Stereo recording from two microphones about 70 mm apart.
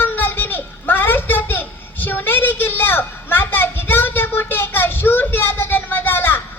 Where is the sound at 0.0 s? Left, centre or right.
Left.